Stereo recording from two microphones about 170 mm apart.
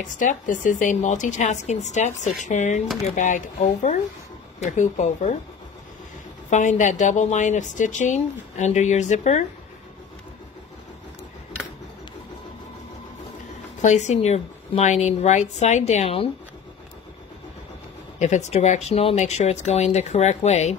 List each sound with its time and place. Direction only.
0.0 s a woman's voice: 50° left (ahead or behind)
6.5 s a woman's voice: 45° left (ahead or behind)
13.7 s a woman's voice: 45° left (ahead or behind)
18.2 s speech: 45° left (ahead or behind)